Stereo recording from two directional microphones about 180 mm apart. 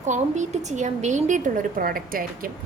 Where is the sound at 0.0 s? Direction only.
40° right (ahead or behind).